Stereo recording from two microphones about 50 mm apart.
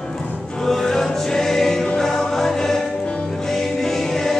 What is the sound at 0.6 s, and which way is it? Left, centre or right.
Choir, centre.